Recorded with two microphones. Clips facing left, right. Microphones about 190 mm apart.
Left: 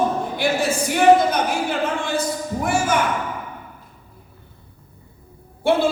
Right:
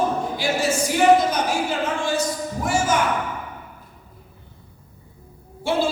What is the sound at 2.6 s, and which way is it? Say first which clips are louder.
Music: left 1 dB; 55° left (ahead or behind).